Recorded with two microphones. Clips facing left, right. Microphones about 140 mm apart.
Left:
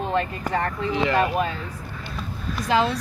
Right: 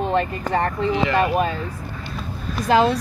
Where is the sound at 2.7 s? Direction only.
45° right (ahead or behind).